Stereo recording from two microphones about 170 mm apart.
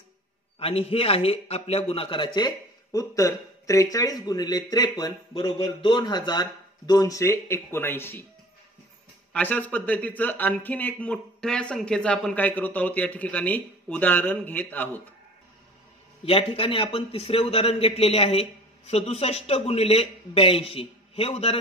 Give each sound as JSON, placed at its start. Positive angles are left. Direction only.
{"t": 0.6, "sound": "a man's voice", "side_deg": 35}
{"t": 9.3, "sound": "a man's voice", "side_deg": 10}
{"t": 16.3, "sound": "a man's voice", "side_deg": 30}